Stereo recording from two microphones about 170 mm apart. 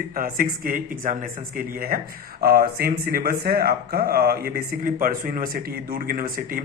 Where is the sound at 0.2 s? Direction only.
55° right (ahead or behind).